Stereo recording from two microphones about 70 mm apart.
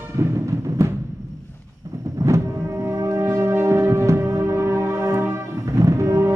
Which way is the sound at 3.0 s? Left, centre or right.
Right.